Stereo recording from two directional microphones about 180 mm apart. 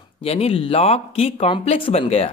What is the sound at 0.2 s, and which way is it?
Speech, 35° left (ahead or behind).